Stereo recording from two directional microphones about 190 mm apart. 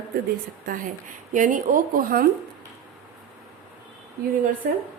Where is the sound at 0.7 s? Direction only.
40° right (ahead or behind).